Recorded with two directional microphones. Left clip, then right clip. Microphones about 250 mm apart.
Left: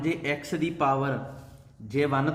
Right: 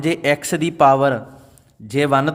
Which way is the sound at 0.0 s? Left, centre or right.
Right.